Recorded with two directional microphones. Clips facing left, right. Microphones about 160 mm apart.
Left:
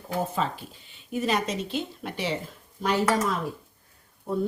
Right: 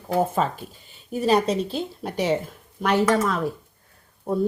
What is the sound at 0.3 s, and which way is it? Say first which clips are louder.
Speech: right 5 dB; 45° right (ahead or behind).